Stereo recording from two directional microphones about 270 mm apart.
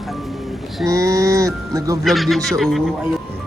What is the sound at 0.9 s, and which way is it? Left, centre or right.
Speech, centre.